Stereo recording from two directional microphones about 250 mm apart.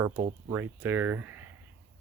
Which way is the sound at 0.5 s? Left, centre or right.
Centre.